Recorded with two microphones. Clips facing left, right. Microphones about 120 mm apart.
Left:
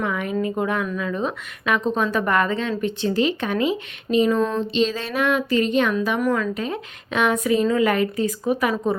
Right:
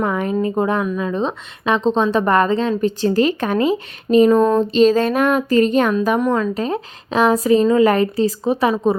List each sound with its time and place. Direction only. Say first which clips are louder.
0.0 s a woman's voice: right 5 dB; 35° right (ahead or behind)
6.1 s a woman's voice: right 4 dB; 25° right (ahead or behind)
6.5 s a woman's voice: right 5 dB; 35° right (ahead or behind)
8.7 s a woman's voice: right 5 dB; 20° right (ahead or behind)